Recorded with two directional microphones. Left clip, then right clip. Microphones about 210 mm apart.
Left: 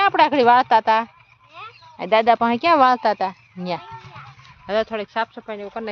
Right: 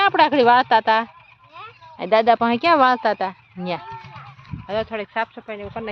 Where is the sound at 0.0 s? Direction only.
5° left (ahead or behind).